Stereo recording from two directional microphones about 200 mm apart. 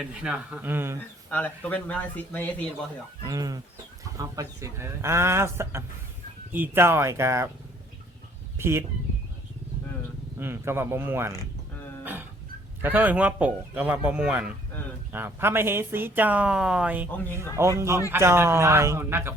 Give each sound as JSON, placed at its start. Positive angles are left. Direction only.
{"t": 0.0, "sound": "speech", "side_deg": -5}
{"t": 1.3, "sound": "speech", "side_deg": 10}
{"t": 3.2, "sound": "speech", "side_deg": -20}
{"t": 8.5, "sound": "speech", "side_deg": -10}
{"t": 10.3, "sound": "speech", "side_deg": -10}
{"t": 12.8, "sound": "speech", "side_deg": -10}